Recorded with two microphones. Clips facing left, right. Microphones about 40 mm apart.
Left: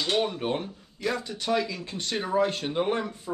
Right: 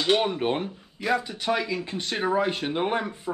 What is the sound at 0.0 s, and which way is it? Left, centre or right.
Speech, right.